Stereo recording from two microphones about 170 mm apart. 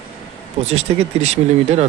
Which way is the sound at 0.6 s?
40° right (ahead or behind).